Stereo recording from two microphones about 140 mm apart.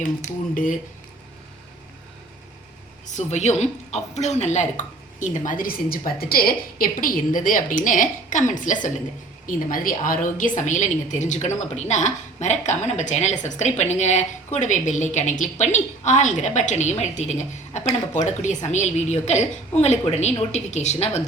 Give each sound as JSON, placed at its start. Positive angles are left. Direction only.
{"t": 0.5, "sound": "a woman's voice", "side_deg": 70}
{"t": 3.2, "sound": "a woman's voice", "side_deg": 55}
{"t": 9.5, "sound": "a woman's voice", "side_deg": 80}